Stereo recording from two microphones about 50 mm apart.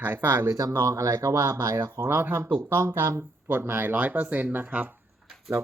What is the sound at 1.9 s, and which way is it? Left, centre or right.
Speech, right.